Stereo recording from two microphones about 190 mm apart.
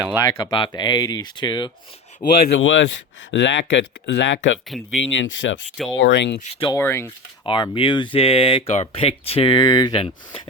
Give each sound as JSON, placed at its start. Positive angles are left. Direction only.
{"t": 0.2, "sound": "speech", "side_deg": 20}
{"t": 2.6, "sound": "speech", "side_deg": 75}
{"t": 6.4, "sound": "speech", "side_deg": 30}
{"t": 6.7, "sound": "speech", "side_deg": 15}
{"t": 7.4, "sound": "speech", "side_deg": 25}